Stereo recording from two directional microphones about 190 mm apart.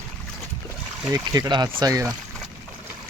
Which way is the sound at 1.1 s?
20° right (ahead or behind).